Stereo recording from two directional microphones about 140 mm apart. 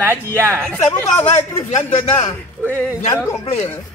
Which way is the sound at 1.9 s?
45° left (ahead or behind).